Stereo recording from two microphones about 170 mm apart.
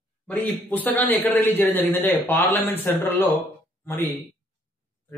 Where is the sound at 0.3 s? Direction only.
10° left (ahead or behind).